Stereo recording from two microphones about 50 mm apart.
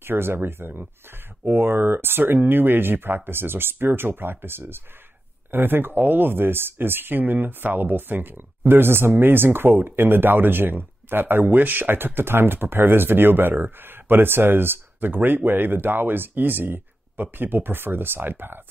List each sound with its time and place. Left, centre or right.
0.0 s speech: right